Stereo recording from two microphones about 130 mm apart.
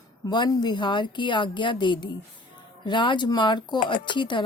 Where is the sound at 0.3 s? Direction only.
35° left (ahead or behind).